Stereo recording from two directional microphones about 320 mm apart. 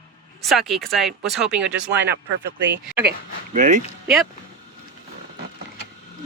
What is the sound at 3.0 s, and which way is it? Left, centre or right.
Speech, right.